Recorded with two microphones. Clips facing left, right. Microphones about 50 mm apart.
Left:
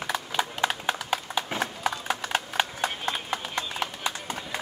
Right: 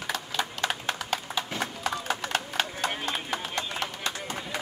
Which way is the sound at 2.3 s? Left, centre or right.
Centre.